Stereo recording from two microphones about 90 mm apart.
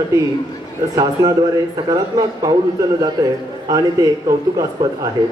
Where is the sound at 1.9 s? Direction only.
40° right (ahead or behind).